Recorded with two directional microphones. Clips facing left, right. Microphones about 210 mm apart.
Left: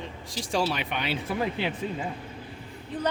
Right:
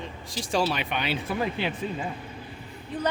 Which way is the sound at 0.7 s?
90° right.